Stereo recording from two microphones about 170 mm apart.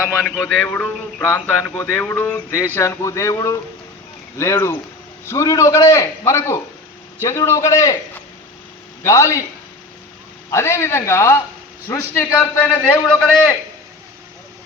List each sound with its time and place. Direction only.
0.3 s a man's voice: 10° left (ahead or behind)
10.5 s a man's voice: 15° left (ahead or behind)